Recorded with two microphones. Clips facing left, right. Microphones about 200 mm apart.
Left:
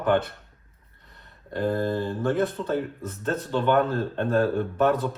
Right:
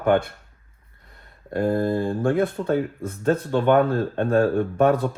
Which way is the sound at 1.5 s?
50° right (ahead or behind).